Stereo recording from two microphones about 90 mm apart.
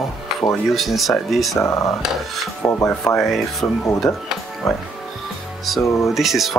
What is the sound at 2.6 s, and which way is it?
Rub, 20° left (ahead or behind).